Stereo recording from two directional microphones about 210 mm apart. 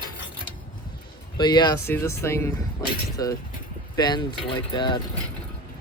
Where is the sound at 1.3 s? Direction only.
20° left (ahead or behind).